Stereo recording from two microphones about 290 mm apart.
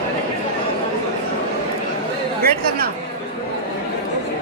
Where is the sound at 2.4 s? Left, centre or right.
Right.